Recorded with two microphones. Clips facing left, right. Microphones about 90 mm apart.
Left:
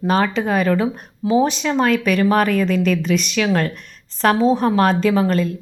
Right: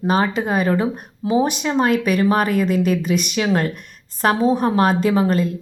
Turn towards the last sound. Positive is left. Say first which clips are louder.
# left 1 dB
turn(degrees=-25)  # may be behind; listen again after turning